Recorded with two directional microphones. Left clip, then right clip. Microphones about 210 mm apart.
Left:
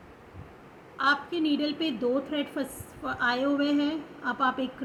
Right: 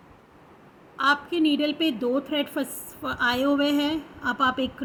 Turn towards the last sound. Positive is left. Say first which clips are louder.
# right 4 dB
turn(degrees=-30)  # may be behind; listen again after turning